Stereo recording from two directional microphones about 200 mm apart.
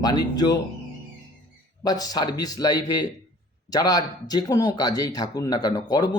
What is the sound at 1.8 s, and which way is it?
Speech, 20° left (ahead or behind).